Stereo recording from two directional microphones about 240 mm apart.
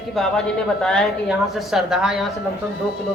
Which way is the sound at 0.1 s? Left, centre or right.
Centre.